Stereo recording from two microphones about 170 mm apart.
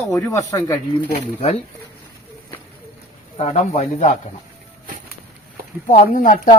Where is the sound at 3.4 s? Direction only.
40° left (ahead or behind).